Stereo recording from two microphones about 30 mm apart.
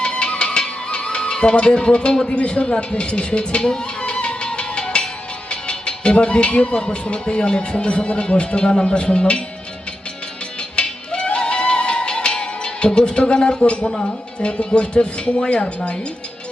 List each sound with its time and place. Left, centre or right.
0.0 s music: left
2.2 s speech: left
2.7 s music: left
5.5 s speech: left
10.8 s music: left
13.6 s speech: left